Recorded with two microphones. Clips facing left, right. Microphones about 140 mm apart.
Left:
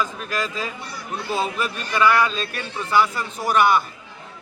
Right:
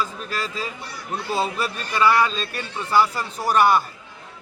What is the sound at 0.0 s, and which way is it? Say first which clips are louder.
Speech: left 2 dB; 35° right (ahead or behind).